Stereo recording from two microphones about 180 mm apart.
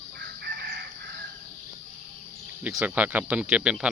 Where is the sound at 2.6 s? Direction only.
10° right (ahead or behind).